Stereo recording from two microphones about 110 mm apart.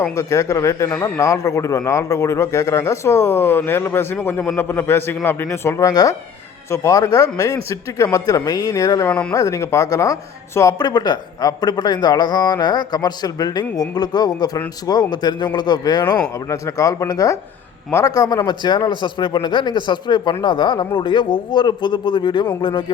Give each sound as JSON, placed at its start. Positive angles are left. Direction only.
{"t": 0.2, "sound": "a man's voice", "side_deg": 30}